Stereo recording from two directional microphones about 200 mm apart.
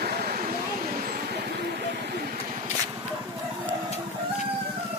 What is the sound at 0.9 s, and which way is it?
Vehicle, 45° right (ahead or behind).